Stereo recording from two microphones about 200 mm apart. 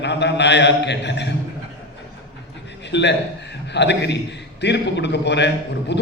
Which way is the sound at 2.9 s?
60° left (ahead or behind).